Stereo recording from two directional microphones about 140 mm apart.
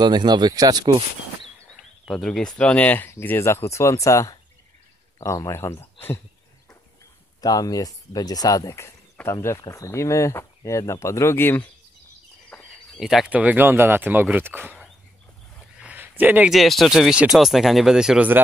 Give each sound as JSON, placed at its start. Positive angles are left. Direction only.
{"t": 0.0, "sound": "speech", "side_deg": -30}
{"t": 2.0, "sound": "speech", "side_deg": 5}
{"t": 7.4, "sound": "speech", "side_deg": 25}
{"t": 12.4, "sound": "speech", "side_deg": 0}
{"t": 15.7, "sound": "a sound", "side_deg": -10}
{"t": 16.5, "sound": "speech", "side_deg": 0}